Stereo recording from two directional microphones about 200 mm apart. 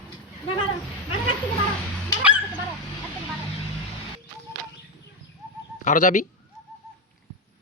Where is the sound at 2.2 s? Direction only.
5° right (ahead or behind).